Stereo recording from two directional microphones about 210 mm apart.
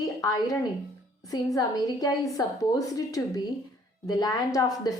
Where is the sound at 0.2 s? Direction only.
15° left (ahead or behind).